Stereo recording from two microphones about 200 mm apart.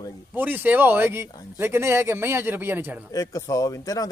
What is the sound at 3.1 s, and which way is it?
Speech, 15° left (ahead or behind).